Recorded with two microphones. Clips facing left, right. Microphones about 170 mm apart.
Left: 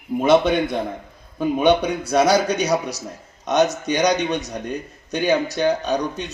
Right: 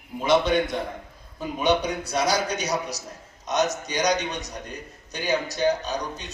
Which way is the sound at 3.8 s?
60° left (ahead or behind).